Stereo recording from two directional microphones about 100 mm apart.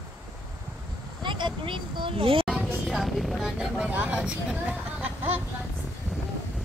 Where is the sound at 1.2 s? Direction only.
55° right (ahead or behind).